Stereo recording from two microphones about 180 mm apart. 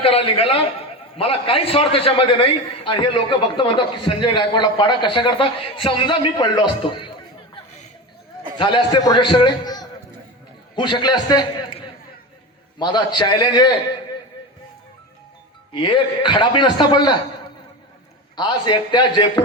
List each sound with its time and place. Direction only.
0.0 s a man's voice: 30° left (ahead or behind)
8.5 s a man's voice: 25° left (ahead or behind)
12.8 s a man's voice: 25° left (ahead or behind)
15.7 s a man's voice: 25° left (ahead or behind)
18.3 s a man's voice: 25° left (ahead or behind)